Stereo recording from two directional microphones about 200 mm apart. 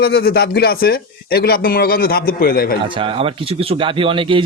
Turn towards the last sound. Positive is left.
turn(degrees=-25)  # may be behind; listen again after turning